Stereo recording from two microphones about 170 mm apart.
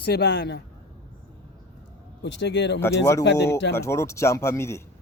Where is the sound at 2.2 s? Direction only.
90° left.